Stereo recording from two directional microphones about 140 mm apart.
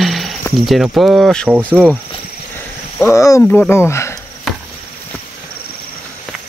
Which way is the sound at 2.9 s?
20° left (ahead or behind).